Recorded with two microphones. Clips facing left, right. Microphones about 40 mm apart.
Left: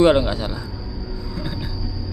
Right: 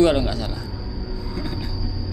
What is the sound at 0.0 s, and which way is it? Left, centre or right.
Speech, left.